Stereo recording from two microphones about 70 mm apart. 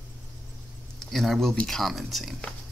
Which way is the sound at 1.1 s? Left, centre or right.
Centre.